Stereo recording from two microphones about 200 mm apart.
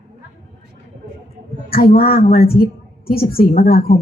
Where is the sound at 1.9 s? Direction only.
50° left (ahead or behind).